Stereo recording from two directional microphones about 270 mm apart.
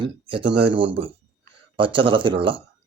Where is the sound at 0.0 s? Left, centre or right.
Centre.